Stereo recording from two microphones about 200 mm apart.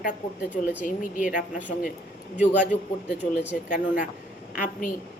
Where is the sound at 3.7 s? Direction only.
40° left (ahead or behind).